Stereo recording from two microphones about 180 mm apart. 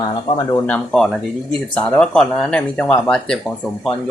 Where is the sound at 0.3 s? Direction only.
20° left (ahead or behind).